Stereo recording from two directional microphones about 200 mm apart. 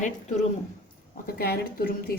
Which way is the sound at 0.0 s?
35° left (ahead or behind).